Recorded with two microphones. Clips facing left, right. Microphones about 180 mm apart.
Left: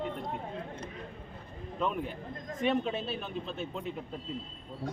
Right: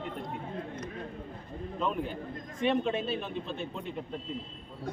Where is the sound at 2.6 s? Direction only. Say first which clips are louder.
Right 2 dB; centre (ahead or behind).